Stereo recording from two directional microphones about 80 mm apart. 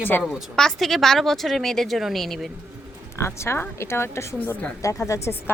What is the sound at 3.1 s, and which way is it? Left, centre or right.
Speech, left.